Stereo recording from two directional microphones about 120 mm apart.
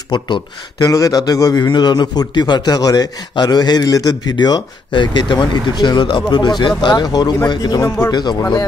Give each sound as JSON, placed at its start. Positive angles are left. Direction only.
{"t": 0.1, "sound": "a man's voice", "side_deg": 40}